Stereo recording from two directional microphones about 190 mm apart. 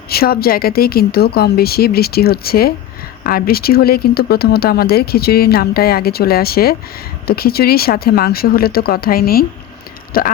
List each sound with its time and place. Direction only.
0.1 s speech: 55° left (ahead or behind)